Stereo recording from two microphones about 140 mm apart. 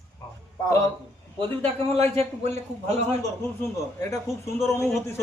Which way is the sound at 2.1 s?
50° right (ahead or behind).